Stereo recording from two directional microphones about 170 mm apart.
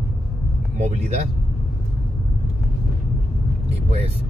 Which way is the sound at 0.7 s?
40° right (ahead or behind).